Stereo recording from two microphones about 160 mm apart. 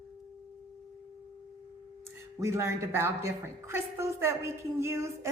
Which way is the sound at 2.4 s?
15° right (ahead or behind).